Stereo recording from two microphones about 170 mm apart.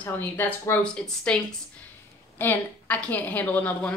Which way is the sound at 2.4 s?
10° left (ahead or behind).